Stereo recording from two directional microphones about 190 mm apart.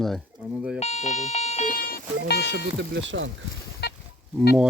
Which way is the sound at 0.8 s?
35° left (ahead or behind).